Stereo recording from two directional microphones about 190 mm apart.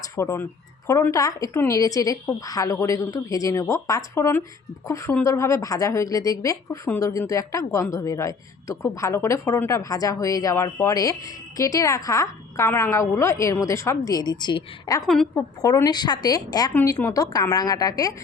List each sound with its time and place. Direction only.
0.2 s a woman's voice: 15° left (ahead or behind)
15.0 s a woman's voice: centre (ahead or behind)
15.4 s a woman's voice: 20° left (ahead or behind)